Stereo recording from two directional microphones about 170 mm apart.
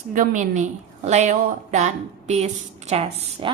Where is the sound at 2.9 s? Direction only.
35° right (ahead or behind).